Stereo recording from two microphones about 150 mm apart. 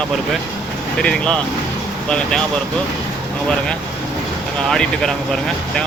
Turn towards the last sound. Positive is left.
turn(degrees=0)  # may be behind; listen again after turning